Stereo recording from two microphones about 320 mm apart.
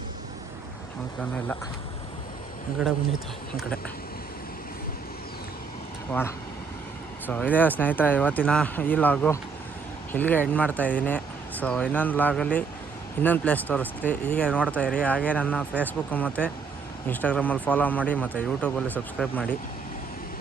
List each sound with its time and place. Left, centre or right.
6.1 s speech: centre